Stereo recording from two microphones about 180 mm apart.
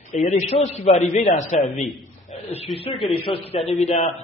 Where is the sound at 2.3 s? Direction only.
35° left (ahead or behind).